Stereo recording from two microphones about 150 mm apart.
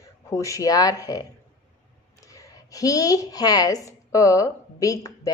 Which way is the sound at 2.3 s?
25° left (ahead or behind).